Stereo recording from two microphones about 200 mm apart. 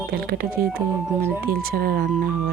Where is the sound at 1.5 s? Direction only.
50° right (ahead or behind).